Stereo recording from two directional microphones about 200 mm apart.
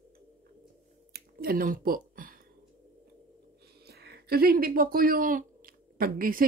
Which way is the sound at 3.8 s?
55° right (ahead or behind).